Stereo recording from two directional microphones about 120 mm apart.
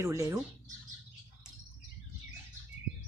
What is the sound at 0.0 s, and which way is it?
Speech, 25° right (ahead or behind).